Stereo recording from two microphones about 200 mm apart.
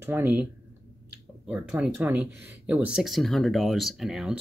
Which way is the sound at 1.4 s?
5° right (ahead or behind).